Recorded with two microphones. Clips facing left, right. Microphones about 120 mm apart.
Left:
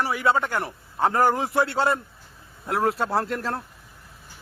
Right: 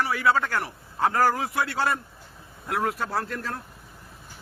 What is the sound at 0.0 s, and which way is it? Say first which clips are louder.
A man's voice: left 1 dB; 25° left (ahead or behind).